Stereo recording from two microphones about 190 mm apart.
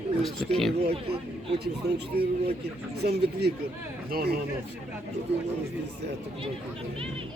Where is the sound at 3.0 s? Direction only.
60° right (ahead or behind).